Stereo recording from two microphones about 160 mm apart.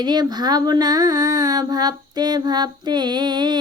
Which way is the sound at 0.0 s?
25° right (ahead or behind).